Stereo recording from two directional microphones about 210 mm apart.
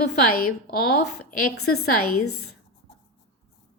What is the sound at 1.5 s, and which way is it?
Speech, 50° left (ahead or behind).